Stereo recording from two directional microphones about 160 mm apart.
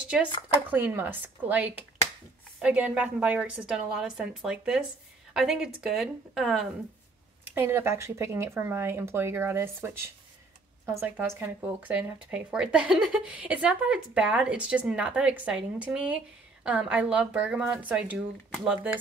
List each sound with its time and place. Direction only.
0.1 s a woman's voice: 5° right (ahead or behind)
7.5 s speech: 15° right (ahead or behind)